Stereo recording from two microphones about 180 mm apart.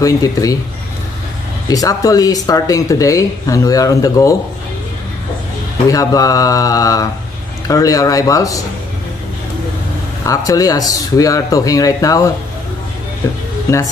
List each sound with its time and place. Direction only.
0.0 s speech: 20° left (ahead or behind)
1.7 s speech: 20° left (ahead or behind)
5.9 s speech: 20° left (ahead or behind)
10.2 s speech: 20° left (ahead or behind)